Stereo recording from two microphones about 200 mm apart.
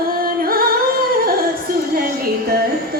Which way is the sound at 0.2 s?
45° right (ahead or behind).